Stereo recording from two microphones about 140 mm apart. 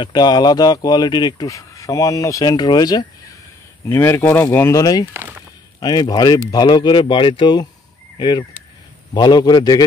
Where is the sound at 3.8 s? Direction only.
20° left (ahead or behind).